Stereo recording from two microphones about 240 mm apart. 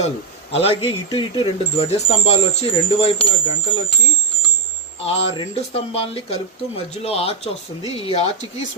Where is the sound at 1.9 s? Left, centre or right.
Left.